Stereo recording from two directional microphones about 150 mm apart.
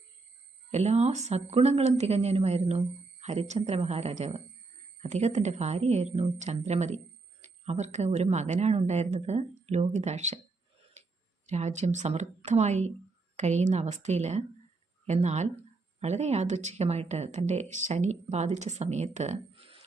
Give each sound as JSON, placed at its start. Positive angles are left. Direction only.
{"t": 0.7, "sound": "speech", "side_deg": -45}
{"t": 11.4, "sound": "speech", "side_deg": -50}